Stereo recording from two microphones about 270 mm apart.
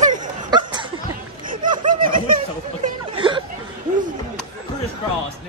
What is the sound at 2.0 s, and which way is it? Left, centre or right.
Speech, right.